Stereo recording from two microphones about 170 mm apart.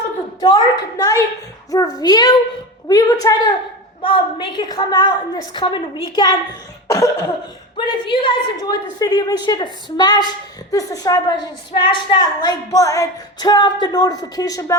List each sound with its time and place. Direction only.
0.4 s a woman's voice: 25° left (ahead or behind)
6.8 s cough: 20° left (ahead or behind)
7.8 s a woman's voice: 30° left (ahead or behind)